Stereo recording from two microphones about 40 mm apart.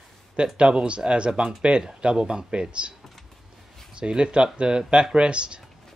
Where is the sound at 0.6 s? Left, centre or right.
Right.